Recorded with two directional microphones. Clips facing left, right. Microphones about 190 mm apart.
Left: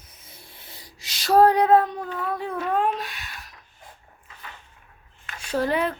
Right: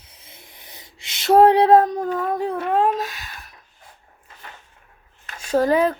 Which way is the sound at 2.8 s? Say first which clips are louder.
Right 4 dB; 40° right (ahead or behind).